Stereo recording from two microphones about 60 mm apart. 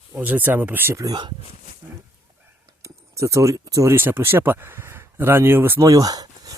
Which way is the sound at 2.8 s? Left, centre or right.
Right.